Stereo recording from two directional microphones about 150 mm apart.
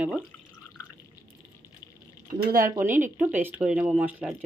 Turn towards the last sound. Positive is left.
turn(degrees=-10)  # may be behind; listen again after turning